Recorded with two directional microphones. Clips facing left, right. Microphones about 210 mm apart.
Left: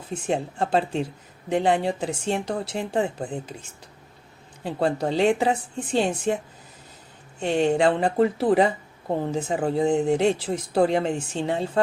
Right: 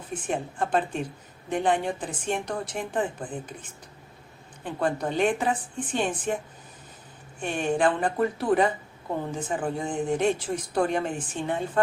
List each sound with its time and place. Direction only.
0.1 s speech: 25° left (ahead or behind)
7.5 s speech: 25° left (ahead or behind)